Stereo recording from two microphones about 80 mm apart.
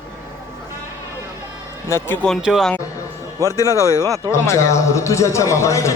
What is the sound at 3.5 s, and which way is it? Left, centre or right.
A man's voice, left.